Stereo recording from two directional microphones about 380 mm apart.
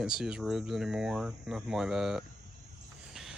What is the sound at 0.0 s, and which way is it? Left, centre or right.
Speech, centre.